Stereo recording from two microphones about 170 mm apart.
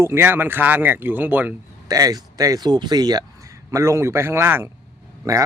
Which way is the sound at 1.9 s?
20° right (ahead or behind).